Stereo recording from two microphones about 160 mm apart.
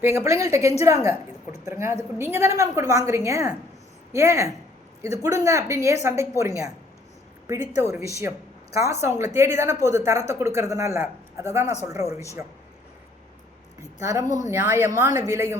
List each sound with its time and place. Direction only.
0.0 s a woman's voice: 15° right (ahead or behind)
7.8 s a woman's voice: 20° right (ahead or behind)
11.6 s speech: 45° left (ahead or behind)
14.0 s a woman's voice: 20° right (ahead or behind)
14.3 s speech: 50° left (ahead or behind)
14.5 s a woman's voice: 15° right (ahead or behind)